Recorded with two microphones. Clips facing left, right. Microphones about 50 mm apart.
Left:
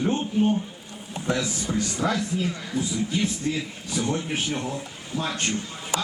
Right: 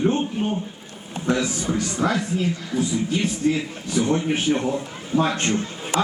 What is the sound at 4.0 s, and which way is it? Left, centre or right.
Speech, right.